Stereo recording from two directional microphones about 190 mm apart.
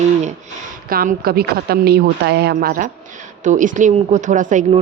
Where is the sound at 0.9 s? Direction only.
50° right (ahead or behind).